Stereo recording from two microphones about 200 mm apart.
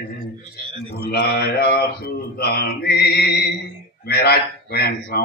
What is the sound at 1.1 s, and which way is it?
Mantra, 50° left (ahead or behind).